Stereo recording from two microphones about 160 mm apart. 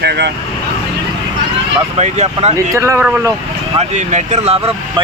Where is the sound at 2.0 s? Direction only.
45° right (ahead or behind).